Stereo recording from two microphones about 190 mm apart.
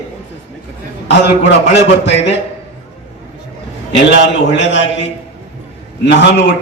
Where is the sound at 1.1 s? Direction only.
65° left (ahead or behind).